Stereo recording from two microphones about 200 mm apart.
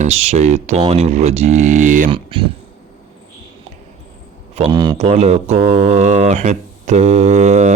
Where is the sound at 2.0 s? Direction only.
25° right (ahead or behind).